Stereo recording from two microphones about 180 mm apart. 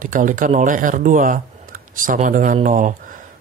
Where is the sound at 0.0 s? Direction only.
45° right (ahead or behind).